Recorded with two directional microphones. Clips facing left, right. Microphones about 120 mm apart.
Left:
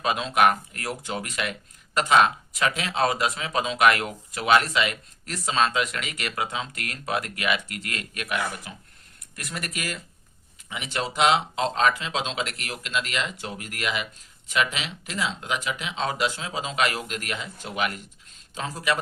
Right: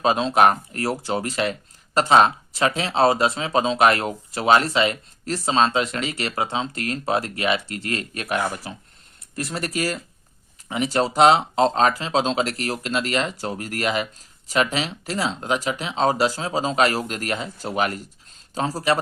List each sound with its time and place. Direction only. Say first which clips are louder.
0.0 s speech: right 4 dB; 30° right (ahead or behind)